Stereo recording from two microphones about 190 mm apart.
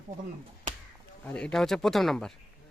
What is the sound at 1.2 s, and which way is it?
Speech, 5° left (ahead or behind).